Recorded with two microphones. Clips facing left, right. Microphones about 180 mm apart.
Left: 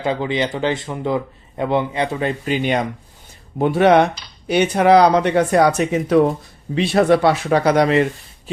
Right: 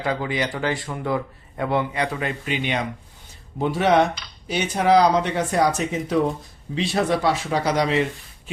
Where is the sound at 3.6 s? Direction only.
60° left (ahead or behind).